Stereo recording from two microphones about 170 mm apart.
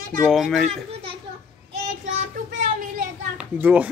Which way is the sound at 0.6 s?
35° right (ahead or behind).